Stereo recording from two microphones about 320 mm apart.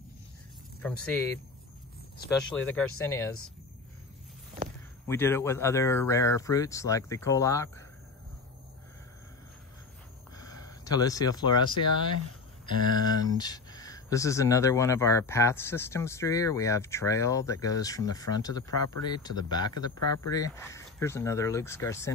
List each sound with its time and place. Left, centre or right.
0.8 s speech: centre
2.5 s speech: centre
2.8 s speech: left
5.0 s speech: centre
10.3 s speech: centre